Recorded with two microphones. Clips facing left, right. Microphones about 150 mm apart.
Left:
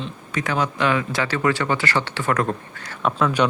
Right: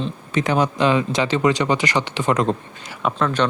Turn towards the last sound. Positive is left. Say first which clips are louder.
# even
turn(degrees=10)  # may be behind; listen again after turning